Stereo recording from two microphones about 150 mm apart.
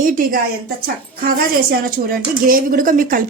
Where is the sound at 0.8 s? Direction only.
80° right.